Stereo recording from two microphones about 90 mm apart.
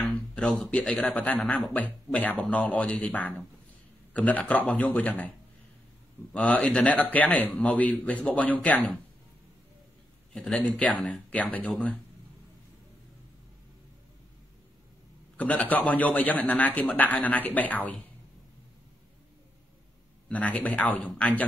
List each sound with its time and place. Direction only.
0.3 s a man's voice: 10° left (ahead or behind)
6.3 s a man's voice: 15° left (ahead or behind)
10.3 s a man's voice: 15° left (ahead or behind)
15.3 s a man's voice: 15° left (ahead or behind)
20.2 s a man's voice: 15° left (ahead or behind)